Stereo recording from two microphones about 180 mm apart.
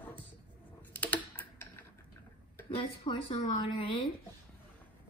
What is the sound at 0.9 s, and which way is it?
Typing, 10° left (ahead or behind).